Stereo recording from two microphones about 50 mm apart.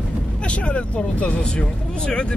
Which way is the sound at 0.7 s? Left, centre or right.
Left.